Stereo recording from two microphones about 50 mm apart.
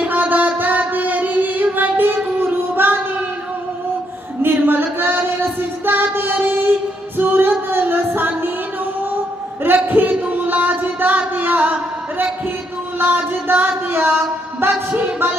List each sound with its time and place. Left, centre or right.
0.1 s music: right
4.4 s music: right
9.7 s a sound: right
13.0 s music: right
14.6 s music: right